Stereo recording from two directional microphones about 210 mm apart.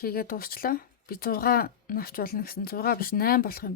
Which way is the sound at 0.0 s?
45° left (ahead or behind).